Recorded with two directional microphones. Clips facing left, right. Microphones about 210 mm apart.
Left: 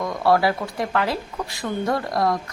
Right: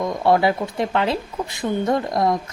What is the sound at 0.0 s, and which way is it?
Speech, 20° right (ahead or behind).